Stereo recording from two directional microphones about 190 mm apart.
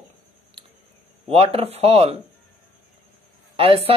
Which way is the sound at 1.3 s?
30° right (ahead or behind).